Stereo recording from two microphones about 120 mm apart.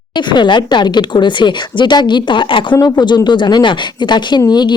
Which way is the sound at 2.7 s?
35° left (ahead or behind).